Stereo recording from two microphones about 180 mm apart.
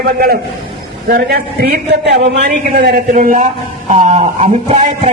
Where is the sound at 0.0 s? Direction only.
55° right (ahead or behind).